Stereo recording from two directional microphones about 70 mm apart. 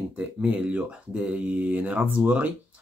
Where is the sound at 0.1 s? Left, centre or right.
Centre.